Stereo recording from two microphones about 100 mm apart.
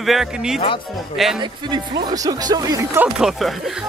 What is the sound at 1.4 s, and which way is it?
Speech, 45° right (ahead or behind).